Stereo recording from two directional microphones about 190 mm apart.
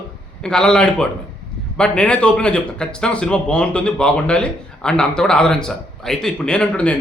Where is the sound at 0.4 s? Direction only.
5° left (ahead or behind).